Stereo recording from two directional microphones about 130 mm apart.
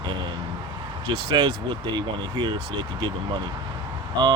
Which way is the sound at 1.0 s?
35° right (ahead or behind).